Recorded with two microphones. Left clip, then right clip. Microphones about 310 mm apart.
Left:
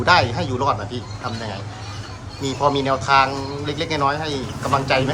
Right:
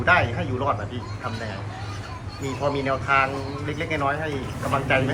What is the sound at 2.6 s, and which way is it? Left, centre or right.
Speech, centre.